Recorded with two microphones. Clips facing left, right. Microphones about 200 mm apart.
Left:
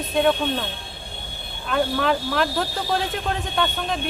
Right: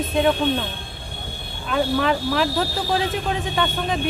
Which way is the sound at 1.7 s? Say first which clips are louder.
Right 1 dB; centre (ahead or behind).